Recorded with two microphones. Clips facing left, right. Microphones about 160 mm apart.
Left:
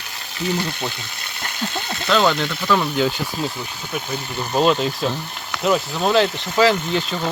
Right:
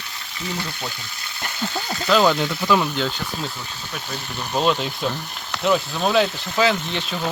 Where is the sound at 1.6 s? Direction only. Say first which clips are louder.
Even; 20° left (ahead or behind).